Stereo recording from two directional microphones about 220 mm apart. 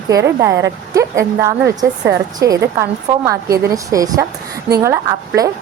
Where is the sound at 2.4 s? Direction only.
50° right (ahead or behind).